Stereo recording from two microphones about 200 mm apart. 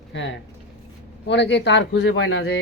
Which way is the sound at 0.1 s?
65° left (ahead or behind).